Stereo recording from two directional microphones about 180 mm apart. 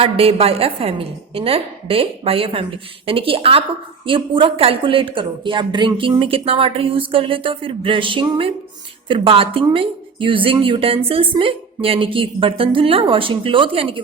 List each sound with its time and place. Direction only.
0.0 s a woman's voice: 30° right (ahead or behind)